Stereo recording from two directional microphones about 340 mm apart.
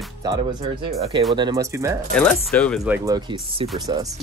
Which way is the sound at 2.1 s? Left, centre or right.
Centre.